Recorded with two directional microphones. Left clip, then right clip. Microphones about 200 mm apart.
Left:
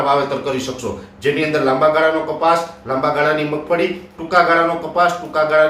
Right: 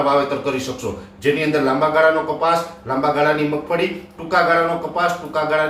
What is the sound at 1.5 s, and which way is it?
Speech, 5° left (ahead or behind).